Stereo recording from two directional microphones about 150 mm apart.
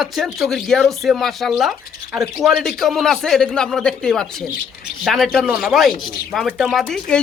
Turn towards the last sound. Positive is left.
turn(degrees=5)  # may be behind; listen again after turning